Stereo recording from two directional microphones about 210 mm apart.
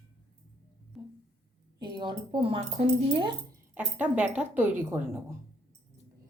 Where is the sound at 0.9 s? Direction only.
Centre (ahead or behind).